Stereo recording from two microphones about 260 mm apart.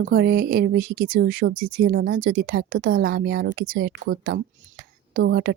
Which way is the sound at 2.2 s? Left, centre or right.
Right.